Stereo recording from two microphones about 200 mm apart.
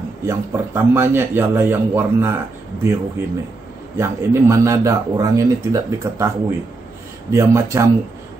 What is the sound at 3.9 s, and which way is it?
Speech, 15° right (ahead or behind).